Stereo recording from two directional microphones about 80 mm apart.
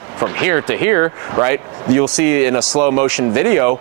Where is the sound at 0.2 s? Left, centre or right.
Right.